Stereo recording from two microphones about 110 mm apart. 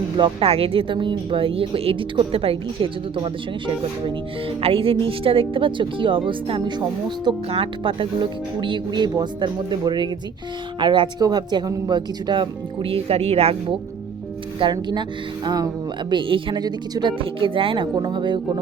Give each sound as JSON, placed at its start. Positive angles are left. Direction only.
{"t": 0.2, "sound": "speech", "side_deg": -60}
{"t": 7.5, "sound": "speech", "side_deg": -55}
{"t": 14.6, "sound": "speech", "side_deg": -45}